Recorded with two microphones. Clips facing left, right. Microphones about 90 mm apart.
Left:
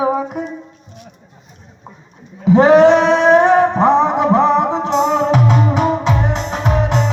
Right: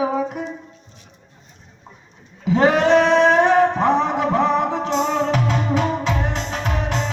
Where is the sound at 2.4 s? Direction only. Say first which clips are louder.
Left 8 dB; 20° left (ahead or behind).